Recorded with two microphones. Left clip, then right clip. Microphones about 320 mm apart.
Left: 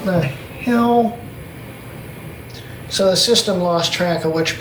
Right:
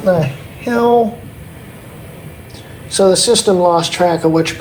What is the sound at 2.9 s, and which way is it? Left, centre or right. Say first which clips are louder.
A man's voice: right 3 dB; centre.